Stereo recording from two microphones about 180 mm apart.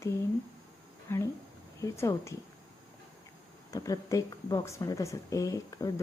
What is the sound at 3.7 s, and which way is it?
Speech, 15° left (ahead or behind).